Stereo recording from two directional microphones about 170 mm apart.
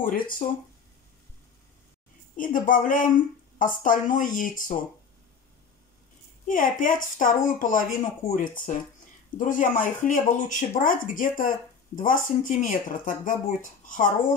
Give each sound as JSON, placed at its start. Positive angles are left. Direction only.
{"t": 0.0, "sound": "speech", "side_deg": 55}
{"t": 2.3, "sound": "speech", "side_deg": 50}
{"t": 6.4, "sound": "speech", "side_deg": 50}